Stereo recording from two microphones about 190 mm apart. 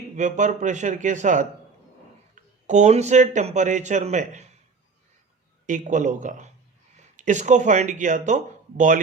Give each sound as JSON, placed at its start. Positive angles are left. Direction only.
{"t": 0.2, "sound": "speech", "side_deg": -40}
{"t": 5.6, "sound": "speech", "side_deg": -40}